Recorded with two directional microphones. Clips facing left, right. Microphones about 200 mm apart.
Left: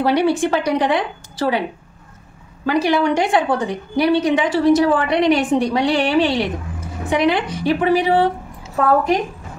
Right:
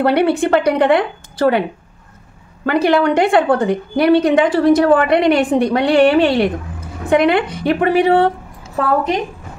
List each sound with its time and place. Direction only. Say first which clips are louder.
0.0 s a woman's voice: right 2 dB; 60° right (ahead or behind)
2.6 s a woman's voice: right 3 dB; 60° right (ahead or behind)